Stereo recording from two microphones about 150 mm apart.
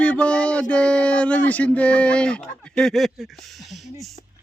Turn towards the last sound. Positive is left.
turn(degrees=0)  # may be behind; listen again after turning